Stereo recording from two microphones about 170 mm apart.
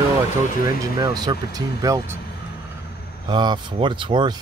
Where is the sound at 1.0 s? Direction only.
20° right (ahead or behind).